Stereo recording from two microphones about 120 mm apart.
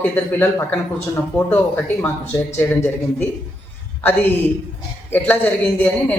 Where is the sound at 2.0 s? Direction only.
20° left (ahead or behind).